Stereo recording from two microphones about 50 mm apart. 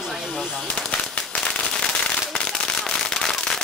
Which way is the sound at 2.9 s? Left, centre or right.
Centre.